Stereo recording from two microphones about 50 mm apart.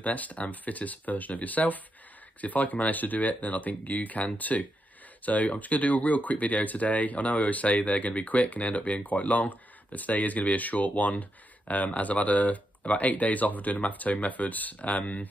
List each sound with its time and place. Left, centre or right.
0.0 s speech: left